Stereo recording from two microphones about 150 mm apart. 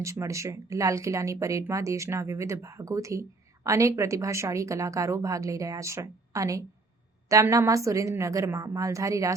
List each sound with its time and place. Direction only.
0.0 s speech: 20° right (ahead or behind)